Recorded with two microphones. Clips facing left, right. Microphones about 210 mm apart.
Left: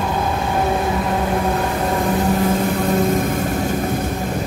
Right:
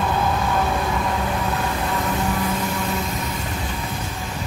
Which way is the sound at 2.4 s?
50° left (ahead or behind).